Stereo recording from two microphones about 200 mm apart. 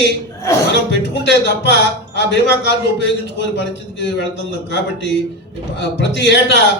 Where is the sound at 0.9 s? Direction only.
60° left (ahead or behind).